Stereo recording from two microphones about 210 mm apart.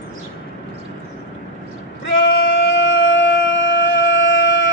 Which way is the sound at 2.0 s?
60° left (ahead or behind).